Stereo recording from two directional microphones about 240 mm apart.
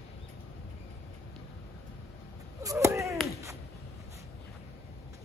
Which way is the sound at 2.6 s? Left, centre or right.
Centre.